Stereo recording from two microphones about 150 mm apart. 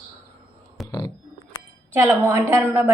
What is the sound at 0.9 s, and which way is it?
Speech, 25° left (ahead or behind).